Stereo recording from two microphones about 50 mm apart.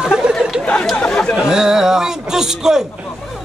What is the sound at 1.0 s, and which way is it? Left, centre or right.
Speech, left.